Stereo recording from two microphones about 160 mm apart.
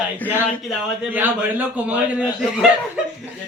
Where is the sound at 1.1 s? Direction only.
10° right (ahead or behind).